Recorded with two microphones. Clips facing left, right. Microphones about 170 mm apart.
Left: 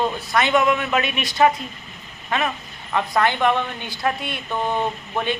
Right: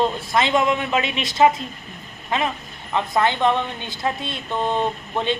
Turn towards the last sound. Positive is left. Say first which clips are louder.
# right 1 dB
turn(degrees=-20)  # may be behind; listen again after turning